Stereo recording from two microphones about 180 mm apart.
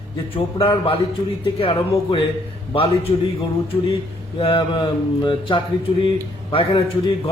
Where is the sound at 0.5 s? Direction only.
30° left (ahead or behind).